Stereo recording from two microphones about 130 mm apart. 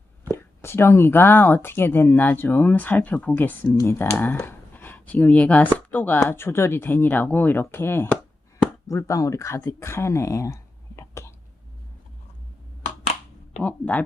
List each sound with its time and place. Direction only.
0.3 s speech: 20° left (ahead or behind)
13.6 s speech: 10° left (ahead or behind)